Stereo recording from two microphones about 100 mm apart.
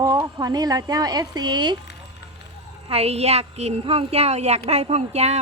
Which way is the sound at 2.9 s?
90° right.